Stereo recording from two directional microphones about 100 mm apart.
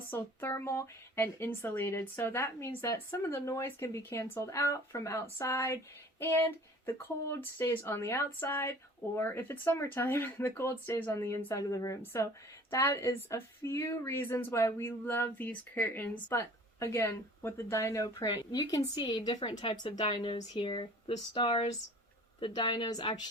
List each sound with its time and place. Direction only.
0.1 s speech: 20° left (ahead or behind); by 20.8 s 55° left (ahead or behind)
21.3 s speech: 70° left (ahead or behind)
22.4 s speech: 55° left (ahead or behind)